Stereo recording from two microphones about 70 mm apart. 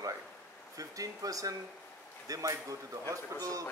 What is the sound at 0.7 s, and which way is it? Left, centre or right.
A man's voice, right.